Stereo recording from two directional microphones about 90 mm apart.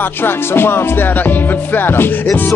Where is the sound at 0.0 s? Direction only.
25° left (ahead or behind).